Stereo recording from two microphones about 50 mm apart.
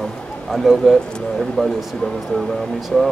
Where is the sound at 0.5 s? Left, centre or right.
Centre.